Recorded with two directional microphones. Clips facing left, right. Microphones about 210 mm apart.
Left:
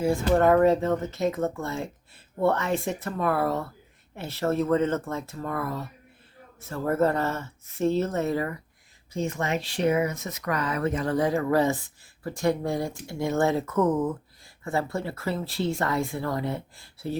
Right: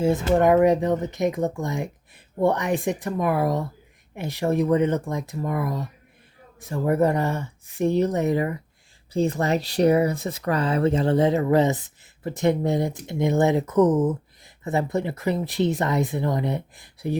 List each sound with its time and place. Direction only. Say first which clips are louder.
0.0 s speech: right 2 dB; 20° right (ahead or behind)
9.1 s speech: right 6 dB; 35° right (ahead or behind); by 17.2 s 15° right (ahead or behind)